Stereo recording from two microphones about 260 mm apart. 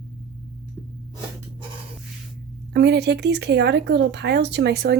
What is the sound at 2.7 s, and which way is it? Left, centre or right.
Speech, right.